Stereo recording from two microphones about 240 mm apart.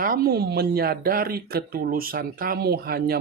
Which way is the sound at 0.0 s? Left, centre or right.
Right.